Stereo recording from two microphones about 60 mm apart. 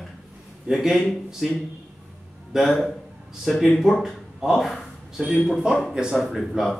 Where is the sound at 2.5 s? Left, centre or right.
Centre.